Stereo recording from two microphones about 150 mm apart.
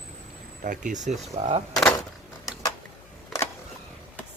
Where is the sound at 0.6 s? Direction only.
60° right (ahead or behind).